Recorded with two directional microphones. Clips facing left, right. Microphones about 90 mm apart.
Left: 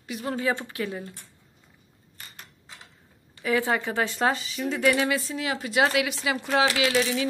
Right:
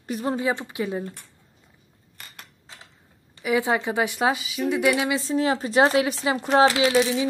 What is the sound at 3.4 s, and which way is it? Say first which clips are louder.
Speech: right 2 dB; 15° right (ahead or behind).